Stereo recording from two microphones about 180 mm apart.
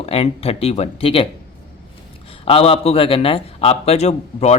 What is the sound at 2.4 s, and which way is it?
Speech, 30° left (ahead or behind).